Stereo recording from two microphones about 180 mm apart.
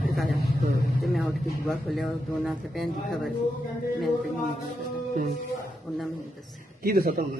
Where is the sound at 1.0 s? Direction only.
Centre (ahead or behind).